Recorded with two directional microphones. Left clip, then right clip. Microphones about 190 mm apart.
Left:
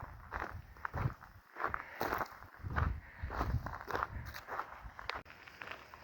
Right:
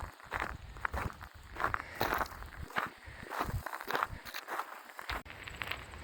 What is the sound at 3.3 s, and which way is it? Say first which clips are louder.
Walk: right 3 dB; 25° right (ahead or behind).